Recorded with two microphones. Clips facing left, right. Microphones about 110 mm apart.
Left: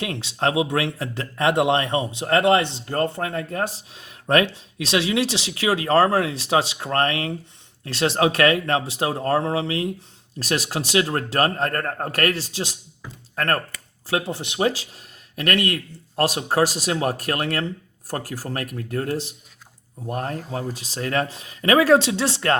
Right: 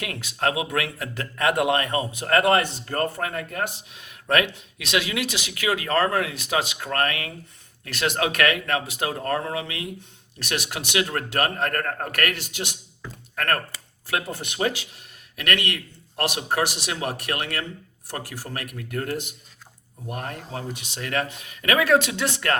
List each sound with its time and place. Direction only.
0.0 s speech: 30° left (ahead or behind)